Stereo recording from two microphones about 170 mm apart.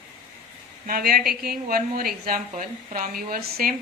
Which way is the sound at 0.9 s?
60° right (ahead or behind).